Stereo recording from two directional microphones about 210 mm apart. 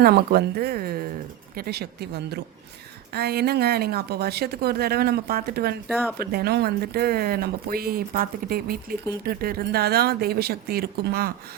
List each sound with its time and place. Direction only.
0.0 s speech: 50° right (ahead or behind)